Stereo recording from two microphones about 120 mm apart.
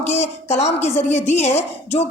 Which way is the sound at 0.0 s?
75° left (ahead or behind).